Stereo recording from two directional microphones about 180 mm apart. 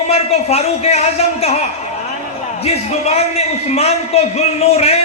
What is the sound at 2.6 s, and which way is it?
A man's voice, 35° left (ahead or behind).